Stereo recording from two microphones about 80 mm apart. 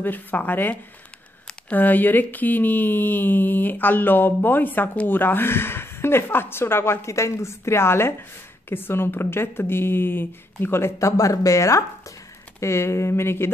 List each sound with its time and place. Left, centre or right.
0.0 s speech: left